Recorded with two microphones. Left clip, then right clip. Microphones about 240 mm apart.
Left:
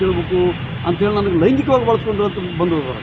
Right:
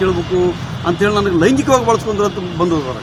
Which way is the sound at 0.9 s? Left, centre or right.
Right.